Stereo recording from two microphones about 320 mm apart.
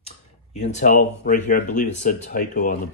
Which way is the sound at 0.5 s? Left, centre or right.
Left.